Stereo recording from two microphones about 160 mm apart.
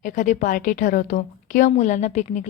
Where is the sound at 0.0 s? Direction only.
55° left (ahead or behind).